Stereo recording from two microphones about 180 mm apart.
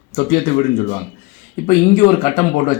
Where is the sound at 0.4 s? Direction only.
40° left (ahead or behind).